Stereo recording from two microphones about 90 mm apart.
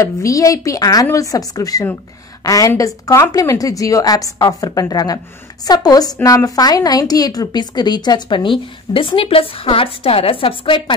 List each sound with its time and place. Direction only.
0.0 s a woman's voice: 35° left (ahead or behind); by 11.0 s 85° left